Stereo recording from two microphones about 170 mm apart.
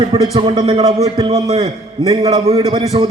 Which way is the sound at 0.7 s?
40° right (ahead or behind).